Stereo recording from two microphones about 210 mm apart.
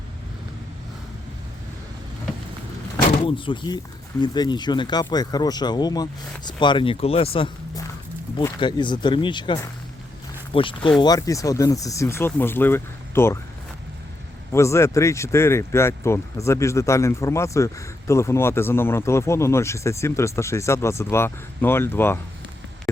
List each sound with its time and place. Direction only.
3.2 s speech: 25° left (ahead or behind)
14.5 s speech: 15° left (ahead or behind)